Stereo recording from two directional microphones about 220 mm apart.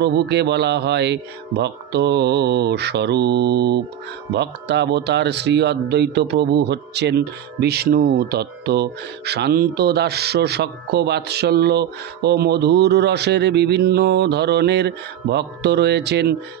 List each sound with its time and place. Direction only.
0.0 s speech: 50° right (ahead or behind)